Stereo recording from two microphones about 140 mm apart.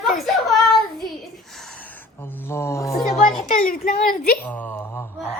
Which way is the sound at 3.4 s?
75° left (ahead or behind).